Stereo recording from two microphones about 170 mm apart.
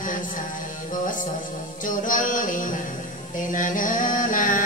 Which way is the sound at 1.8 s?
50° left (ahead or behind).